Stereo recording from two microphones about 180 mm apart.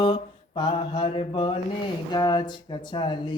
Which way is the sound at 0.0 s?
25° left (ahead or behind).